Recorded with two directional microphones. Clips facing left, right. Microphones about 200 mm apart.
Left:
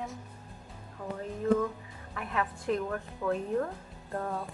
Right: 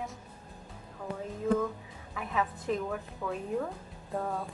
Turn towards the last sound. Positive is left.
turn(degrees=0)  # may be behind; listen again after turning